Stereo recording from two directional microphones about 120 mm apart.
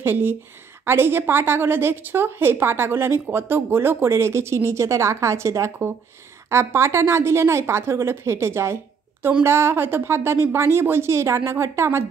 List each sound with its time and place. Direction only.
0.0 s a woman's voice: 20° right (ahead or behind)